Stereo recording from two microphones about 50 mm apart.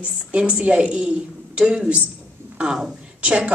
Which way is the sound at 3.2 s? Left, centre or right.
Right.